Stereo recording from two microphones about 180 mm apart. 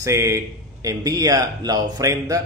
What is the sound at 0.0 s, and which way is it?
A man's voice, 15° right (ahead or behind).